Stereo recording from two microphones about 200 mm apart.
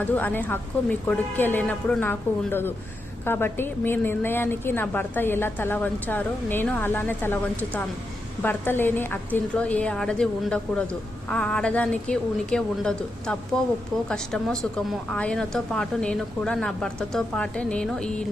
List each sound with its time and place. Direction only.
0.0 s a woman's voice: 10° left (ahead or behind)